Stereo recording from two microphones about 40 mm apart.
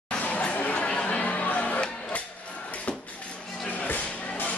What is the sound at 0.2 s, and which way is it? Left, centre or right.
Chatter, left.